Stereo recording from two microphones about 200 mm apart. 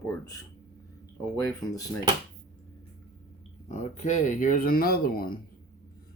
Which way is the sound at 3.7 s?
35° left (ahead or behind).